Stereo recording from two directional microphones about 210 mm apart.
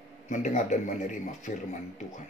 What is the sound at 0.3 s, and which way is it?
A man's voice, 35° left (ahead or behind).